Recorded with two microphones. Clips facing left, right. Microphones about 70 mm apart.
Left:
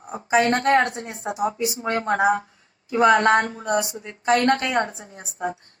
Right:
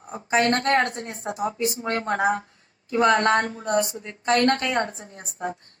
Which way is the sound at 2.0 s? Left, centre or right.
Left.